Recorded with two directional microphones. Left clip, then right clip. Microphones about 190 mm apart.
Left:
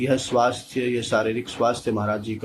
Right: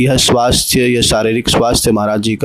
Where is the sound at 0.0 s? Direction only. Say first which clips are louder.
Right 9 dB; 60° right (ahead or behind).